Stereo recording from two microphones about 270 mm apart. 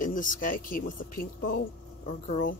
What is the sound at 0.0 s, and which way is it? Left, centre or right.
Speech, left.